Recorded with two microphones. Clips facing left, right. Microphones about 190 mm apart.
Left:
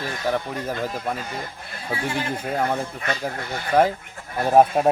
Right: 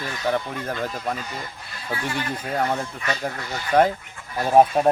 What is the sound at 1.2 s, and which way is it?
Speech, 50° left (ahead or behind).